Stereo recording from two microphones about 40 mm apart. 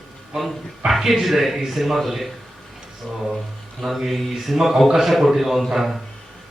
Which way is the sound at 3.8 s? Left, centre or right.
Centre.